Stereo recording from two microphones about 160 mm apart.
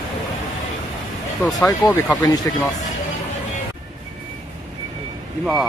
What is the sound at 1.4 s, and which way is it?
Speech, 10° left (ahead or behind).